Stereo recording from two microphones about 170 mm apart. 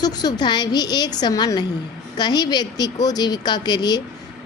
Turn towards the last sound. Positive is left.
turn(degrees=25)  # may be behind; listen again after turning